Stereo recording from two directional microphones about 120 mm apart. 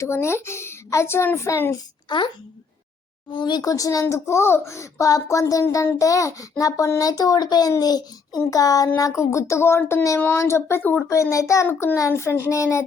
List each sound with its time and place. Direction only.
0.0 s a child's voice: 20° left (ahead or behind)
1.7 s a child's voice: 40° left (ahead or behind)
3.2 s a sound: 40° left (ahead or behind)
4.0 s a child's voice: 25° left (ahead or behind)
6.6 s a sound: 30° left (ahead or behind)
9.0 s a child's voice: 25° left (ahead or behind)